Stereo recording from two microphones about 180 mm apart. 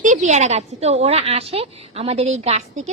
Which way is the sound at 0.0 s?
45° right (ahead or behind).